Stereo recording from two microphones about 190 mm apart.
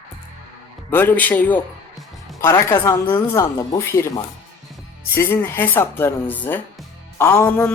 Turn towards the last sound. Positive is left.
turn(degrees=10)  # may be behind; listen again after turning